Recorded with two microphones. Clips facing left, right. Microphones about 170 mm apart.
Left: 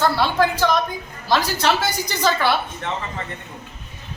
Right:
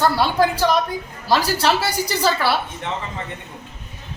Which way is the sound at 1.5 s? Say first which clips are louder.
Right 1 dB; 35° right (ahead or behind).